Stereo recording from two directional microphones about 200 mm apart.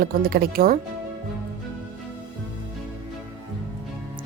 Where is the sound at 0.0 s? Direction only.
50° right (ahead or behind).